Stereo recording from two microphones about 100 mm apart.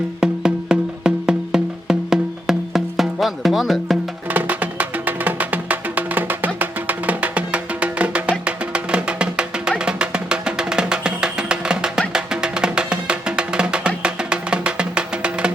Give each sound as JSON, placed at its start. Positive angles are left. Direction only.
{"t": 0.2, "sound": "music", "side_deg": -5}
{"t": 4.3, "sound": "music", "side_deg": -15}